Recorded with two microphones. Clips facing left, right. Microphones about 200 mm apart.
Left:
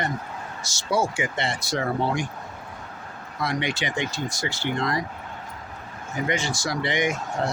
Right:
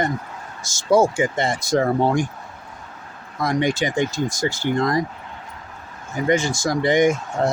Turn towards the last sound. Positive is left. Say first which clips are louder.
# right 7 dB
turn(degrees=-45)  # may be behind; listen again after turning